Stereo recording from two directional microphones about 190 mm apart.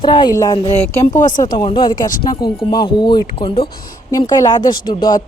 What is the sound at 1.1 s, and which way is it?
Speech, 40° left (ahead or behind).